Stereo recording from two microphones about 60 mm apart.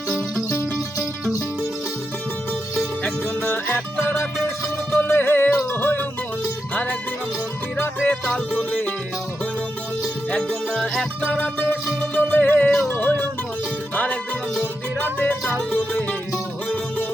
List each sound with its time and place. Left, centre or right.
0.1 s music: centre
3.0 s music: left
4.9 s music: left
8.5 s music: left
11.2 s music: left
12.9 s speech: left
13.9 s music: left